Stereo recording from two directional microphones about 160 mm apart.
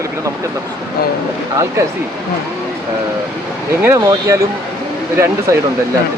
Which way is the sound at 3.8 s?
15° right (ahead or behind).